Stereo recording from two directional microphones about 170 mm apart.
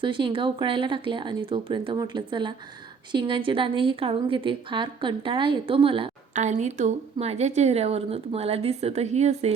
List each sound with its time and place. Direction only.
0.0 s a woman's voice: 30° right (ahead or behind)
6.3 s speech: 45° right (ahead or behind)